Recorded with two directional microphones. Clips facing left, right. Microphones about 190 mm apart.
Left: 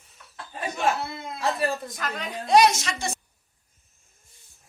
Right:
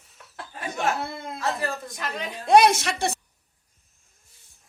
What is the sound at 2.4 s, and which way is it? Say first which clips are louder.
Speech: right 2 dB; 55° right (ahead or behind).